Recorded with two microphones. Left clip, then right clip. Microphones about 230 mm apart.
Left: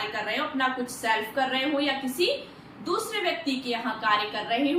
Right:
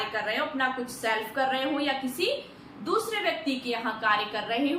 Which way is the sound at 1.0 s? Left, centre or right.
Centre.